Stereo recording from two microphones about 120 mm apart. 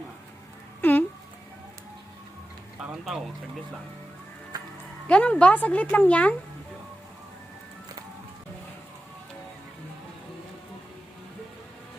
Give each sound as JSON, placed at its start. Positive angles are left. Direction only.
{"t": 0.8, "sound": "a sound", "side_deg": 15}
{"t": 2.8, "sound": "speech", "side_deg": -5}
{"t": 5.0, "sound": "speech", "side_deg": 10}